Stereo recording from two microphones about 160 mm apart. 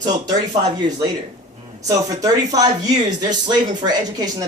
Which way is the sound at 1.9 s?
20° right (ahead or behind).